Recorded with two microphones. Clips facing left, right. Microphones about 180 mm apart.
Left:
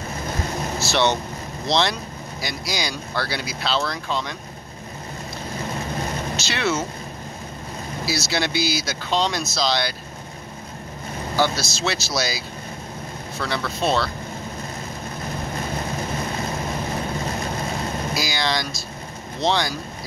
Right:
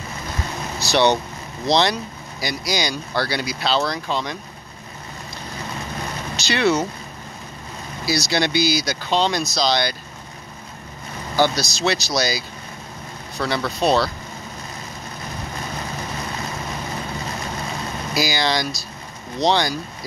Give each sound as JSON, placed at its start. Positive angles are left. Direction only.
{"t": 0.7, "sound": "speech", "side_deg": 0}
{"t": 6.3, "sound": "speech", "side_deg": 0}
{"t": 8.0, "sound": "speech", "side_deg": 5}
{"t": 11.3, "sound": "speech", "side_deg": 0}
{"t": 18.1, "sound": "speech", "side_deg": 0}